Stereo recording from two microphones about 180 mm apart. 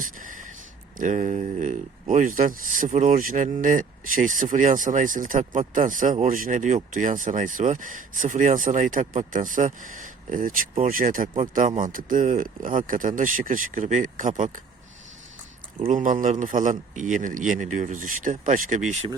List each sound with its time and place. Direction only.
0.0 s a sound: 45° right (ahead or behind)
0.9 s speech: 45° right (ahead or behind)
15.9 s speech: 45° right (ahead or behind)